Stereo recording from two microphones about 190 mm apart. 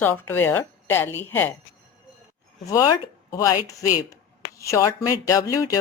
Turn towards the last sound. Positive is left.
turn(degrees=15)  # may be behind; listen again after turning